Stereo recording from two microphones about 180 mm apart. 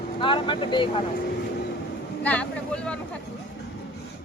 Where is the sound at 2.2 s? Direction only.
5° left (ahead or behind).